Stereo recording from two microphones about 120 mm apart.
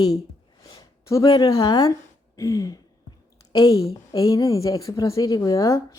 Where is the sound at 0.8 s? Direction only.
30° left (ahead or behind).